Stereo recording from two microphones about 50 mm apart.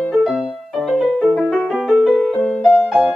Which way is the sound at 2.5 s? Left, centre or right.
Centre.